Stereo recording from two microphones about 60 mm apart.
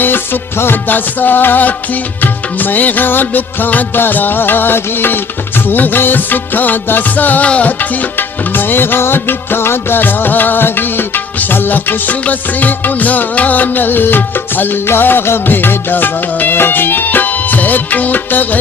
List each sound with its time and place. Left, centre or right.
0.0 s music: left